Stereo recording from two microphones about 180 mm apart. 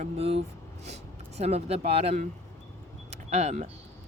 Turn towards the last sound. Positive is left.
turn(degrees=-40)  # may be behind; listen again after turning